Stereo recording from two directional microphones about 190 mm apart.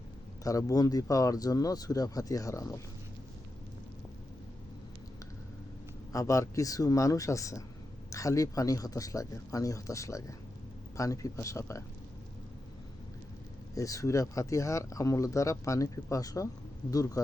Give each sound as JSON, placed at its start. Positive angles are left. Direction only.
{"t": 0.4, "sound": "speech", "side_deg": 20}
{"t": 6.1, "sound": "speech", "side_deg": 15}
{"t": 13.7, "sound": "speech", "side_deg": 15}